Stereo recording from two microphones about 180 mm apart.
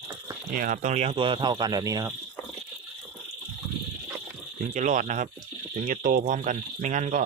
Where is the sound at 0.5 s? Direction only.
50° right (ahead or behind); by 2.1 s 20° right (ahead or behind).